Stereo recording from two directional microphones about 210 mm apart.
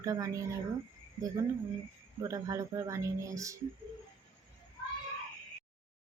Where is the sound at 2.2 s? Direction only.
15° right (ahead or behind).